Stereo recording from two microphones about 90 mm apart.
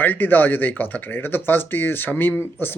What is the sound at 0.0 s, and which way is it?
Speech, 20° left (ahead or behind).